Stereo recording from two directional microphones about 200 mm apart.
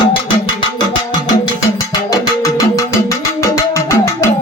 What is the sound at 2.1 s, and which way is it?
Music, 15° left (ahead or behind).